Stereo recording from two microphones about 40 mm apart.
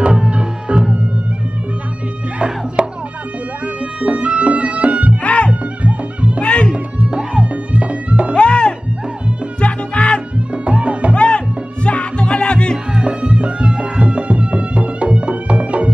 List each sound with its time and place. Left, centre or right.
0.0 s music: right
2.3 s music: right
5.2 s music: left
5.5 s music: right
6.4 s music: left
7.1 s music: centre
7.4 s music: right
8.4 s music: left
10.5 s music: right
11.1 s music: left
12.9 s music: right